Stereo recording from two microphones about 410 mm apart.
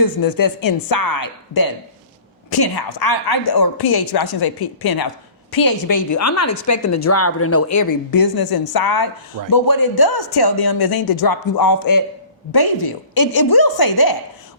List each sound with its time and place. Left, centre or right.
0.0 s a woman's voice: left